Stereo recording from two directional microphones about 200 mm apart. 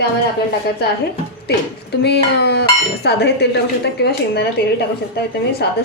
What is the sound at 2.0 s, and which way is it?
Dishes, 55° left (ahead or behind).